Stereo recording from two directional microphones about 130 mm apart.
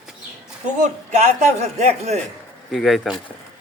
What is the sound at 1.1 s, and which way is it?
A man's voice, 60° right (ahead or behind).